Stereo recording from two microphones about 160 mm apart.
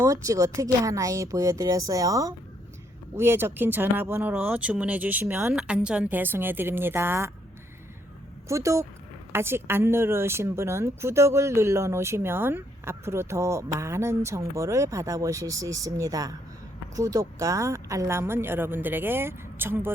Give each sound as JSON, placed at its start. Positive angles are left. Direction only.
{"t": 0.0, "sound": "speech", "side_deg": -20}
{"t": 8.4, "sound": "speech", "side_deg": -20}